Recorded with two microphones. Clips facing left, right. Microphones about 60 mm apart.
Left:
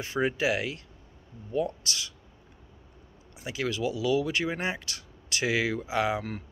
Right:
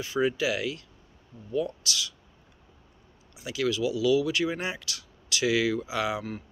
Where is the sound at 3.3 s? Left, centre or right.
Left.